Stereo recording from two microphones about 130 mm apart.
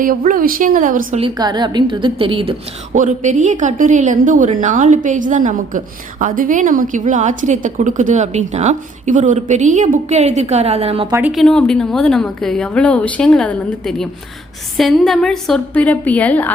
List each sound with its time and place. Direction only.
0.0 s a woman's voice: 90° right
1.4 s a woman's voice: 35° right (ahead or behind)
2.9 s a woman's voice: 75° right (ahead or behind); by 11.1 s 50° right (ahead or behind)
11.3 s a woman's voice: centre (ahead or behind)